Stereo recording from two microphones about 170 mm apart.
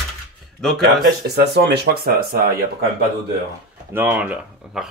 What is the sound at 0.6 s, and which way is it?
Speech, centre (ahead or behind).